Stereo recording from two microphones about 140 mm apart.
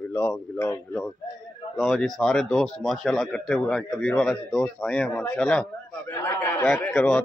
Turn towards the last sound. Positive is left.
turn(degrees=10)  # may be behind; listen again after turning